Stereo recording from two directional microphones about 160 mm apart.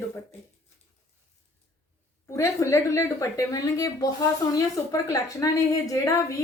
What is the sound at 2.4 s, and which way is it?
A woman's voice, 15° left (ahead or behind).